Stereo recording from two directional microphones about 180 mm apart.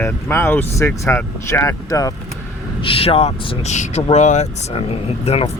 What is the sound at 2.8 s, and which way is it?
Speech, 30° left (ahead or behind).